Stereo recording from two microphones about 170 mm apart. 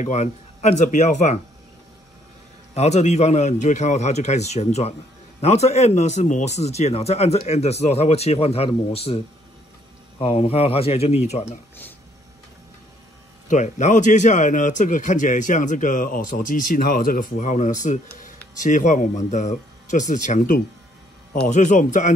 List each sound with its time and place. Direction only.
0.0 s a man's voice: 40° left (ahead or behind)
2.7 s speech: 40° left (ahead or behind)
10.2 s speech: 35° left (ahead or behind)
13.5 s a man's voice: 45° left (ahead or behind)